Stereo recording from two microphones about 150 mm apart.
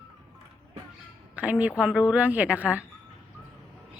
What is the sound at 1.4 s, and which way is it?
A woman's voice, 10° right (ahead or behind).